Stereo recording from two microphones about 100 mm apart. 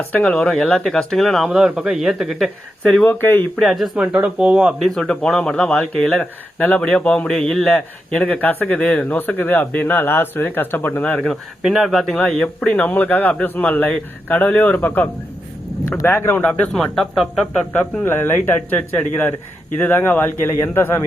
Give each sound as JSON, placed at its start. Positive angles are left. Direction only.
{"t": 0.0, "sound": "speech", "side_deg": 15}
{"t": 2.8, "sound": "speech", "side_deg": 5}
{"t": 3.1, "sound": "speech", "side_deg": 20}
{"t": 3.6, "sound": "speech", "side_deg": 0}
{"t": 4.9, "sound": "speech", "side_deg": 5}
{"t": 11.6, "sound": "speech", "side_deg": 0}
{"t": 16.7, "sound": "speech", "side_deg": 5}
{"t": 18.0, "sound": "speech", "side_deg": 20}